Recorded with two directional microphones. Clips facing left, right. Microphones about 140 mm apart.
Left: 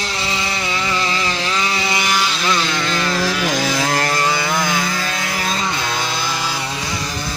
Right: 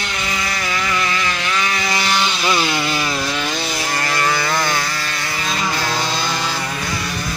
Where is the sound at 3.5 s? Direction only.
90° left.